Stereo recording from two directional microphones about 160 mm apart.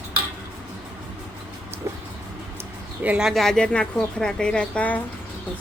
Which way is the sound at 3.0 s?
5° right (ahead or behind).